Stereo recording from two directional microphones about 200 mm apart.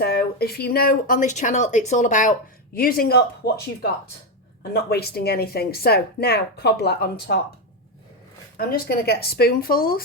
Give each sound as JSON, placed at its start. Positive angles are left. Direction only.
{"t": 0.0, "sound": "speech", "side_deg": 50}
{"t": 4.7, "sound": "speech", "side_deg": 50}
{"t": 8.5, "sound": "speech", "side_deg": 50}